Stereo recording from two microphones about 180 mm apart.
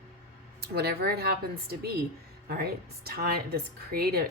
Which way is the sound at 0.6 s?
60° right (ahead or behind).